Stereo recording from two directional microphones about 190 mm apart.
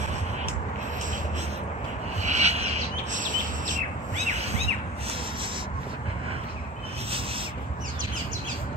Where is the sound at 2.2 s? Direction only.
35° right (ahead or behind).